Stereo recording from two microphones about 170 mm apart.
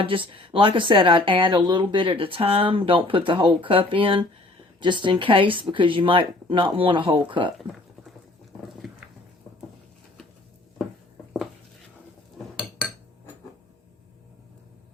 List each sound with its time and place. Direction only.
0.0 s speech: 30° right (ahead or behind)